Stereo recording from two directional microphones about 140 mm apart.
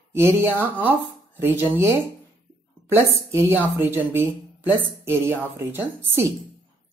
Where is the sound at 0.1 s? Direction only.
15° right (ahead or behind).